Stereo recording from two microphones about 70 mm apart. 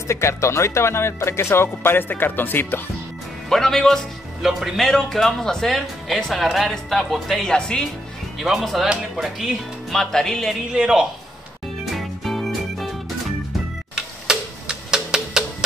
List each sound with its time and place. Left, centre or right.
0.1 s speech: left
3.4 s speech: centre
8.4 s speech: centre
10.7 s a man's voice: centre
11.8 s music: centre
13.9 s tick-tock: centre